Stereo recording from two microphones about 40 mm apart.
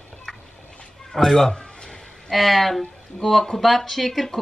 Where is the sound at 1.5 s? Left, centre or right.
Centre.